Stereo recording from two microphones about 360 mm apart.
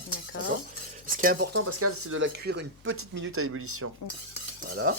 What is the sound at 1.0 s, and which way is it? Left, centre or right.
Speech, right.